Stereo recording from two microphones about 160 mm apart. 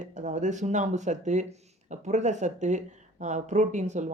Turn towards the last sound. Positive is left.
turn(degrees=-50)  # may be behind; listen again after turning